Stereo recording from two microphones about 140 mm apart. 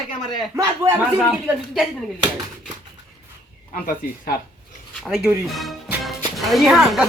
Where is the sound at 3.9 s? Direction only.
80° left.